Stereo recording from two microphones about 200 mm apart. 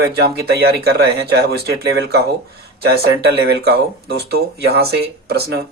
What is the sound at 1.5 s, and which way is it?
Speech, 55° right (ahead or behind).